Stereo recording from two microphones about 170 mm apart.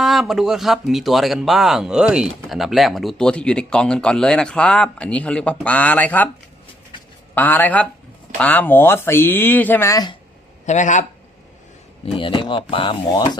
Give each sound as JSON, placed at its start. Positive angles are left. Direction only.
{"t": 0.0, "sound": "speech", "side_deg": 0}
{"t": 7.3, "sound": "speech", "side_deg": 10}
{"t": 10.7, "sound": "speech", "side_deg": 45}
{"t": 12.1, "sound": "speech", "side_deg": 30}